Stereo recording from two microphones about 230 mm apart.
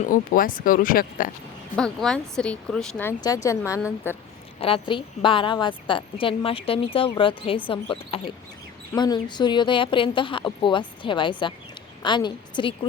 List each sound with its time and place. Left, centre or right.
0.0 s speech: left
1.7 s a woman's voice: centre
4.6 s a woman's voice: left